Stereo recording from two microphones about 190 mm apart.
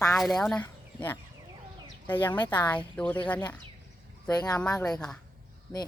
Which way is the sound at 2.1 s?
10° left (ahead or behind).